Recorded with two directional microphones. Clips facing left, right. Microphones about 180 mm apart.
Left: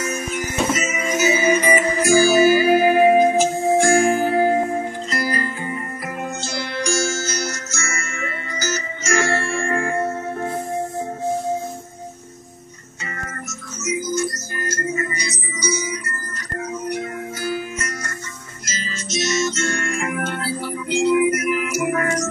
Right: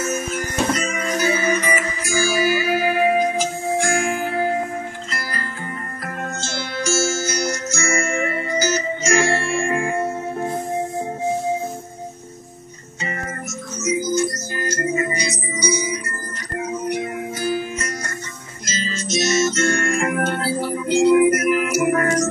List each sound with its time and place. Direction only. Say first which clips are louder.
0.0 s music: right 1 dB; centre (ahead or behind)
1.4 s music: left 4 dB; 25° left (ahead or behind)
6.2 s music: even; centre (ahead or behind)
9.1 s music: right 1 dB; 15° right (ahead or behind)
14.1 s music: right 3 dB; 20° right (ahead or behind)
19.1 s music: right 3 dB; 40° right (ahead or behind)